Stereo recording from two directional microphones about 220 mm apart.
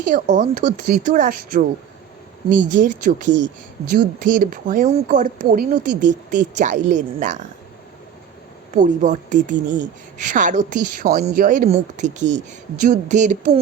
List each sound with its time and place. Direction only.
0.0 s a woman's voice: 35° right (ahead or behind)
8.7 s a woman's voice: 35° right (ahead or behind)